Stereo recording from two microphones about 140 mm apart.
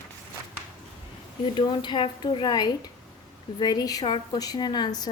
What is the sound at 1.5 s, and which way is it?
A woman's voice, 35° left (ahead or behind).